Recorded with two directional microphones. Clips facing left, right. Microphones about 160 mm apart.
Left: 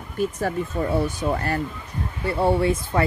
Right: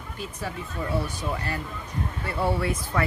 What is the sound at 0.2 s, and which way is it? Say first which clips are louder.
Speech: left 11 dB; 50° left (ahead or behind).